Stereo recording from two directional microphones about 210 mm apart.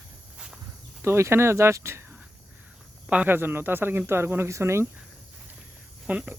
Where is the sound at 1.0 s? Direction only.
10° right (ahead or behind).